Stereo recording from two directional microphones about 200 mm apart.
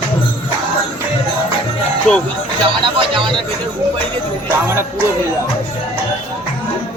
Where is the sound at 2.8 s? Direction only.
25° right (ahead or behind).